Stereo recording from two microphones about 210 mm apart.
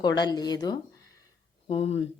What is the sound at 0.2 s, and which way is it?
Speech, 20° left (ahead or behind).